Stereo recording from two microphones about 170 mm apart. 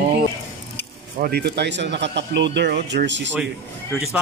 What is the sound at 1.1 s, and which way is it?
Speech, 60° right (ahead or behind).